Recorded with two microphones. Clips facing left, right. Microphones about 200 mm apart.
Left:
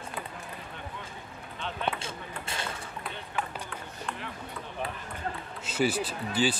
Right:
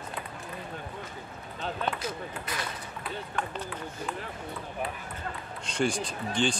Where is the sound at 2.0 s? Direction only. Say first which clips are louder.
Right 4 dB; 25° left (ahead or behind).